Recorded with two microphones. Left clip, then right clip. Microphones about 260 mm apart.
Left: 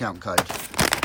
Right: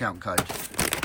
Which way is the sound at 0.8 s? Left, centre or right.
Left.